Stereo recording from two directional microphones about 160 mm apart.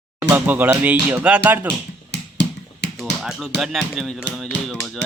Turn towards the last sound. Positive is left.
turn(degrees=5)  # may be behind; listen again after turning